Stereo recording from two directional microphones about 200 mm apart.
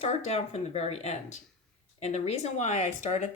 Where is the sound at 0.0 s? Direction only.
35° left (ahead or behind).